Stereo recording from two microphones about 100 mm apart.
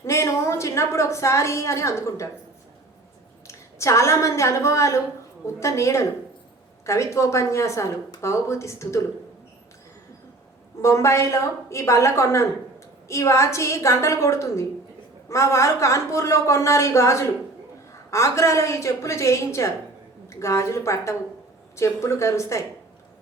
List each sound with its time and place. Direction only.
0.0 s a woman's voice: 30° left (ahead or behind)
3.4 s a woman's voice: 30° left (ahead or behind)
10.8 s a woman's voice: 30° left (ahead or behind)